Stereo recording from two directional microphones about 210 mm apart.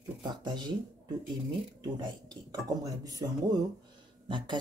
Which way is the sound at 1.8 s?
20° right (ahead or behind).